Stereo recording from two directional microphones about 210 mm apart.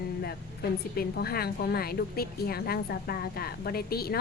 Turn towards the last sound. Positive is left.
turn(degrees=45)  # may be behind; listen again after turning